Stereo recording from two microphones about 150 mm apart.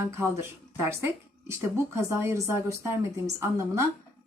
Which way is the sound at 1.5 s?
20° right (ahead or behind).